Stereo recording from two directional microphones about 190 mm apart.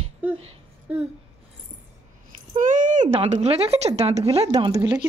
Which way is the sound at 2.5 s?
45° right (ahead or behind).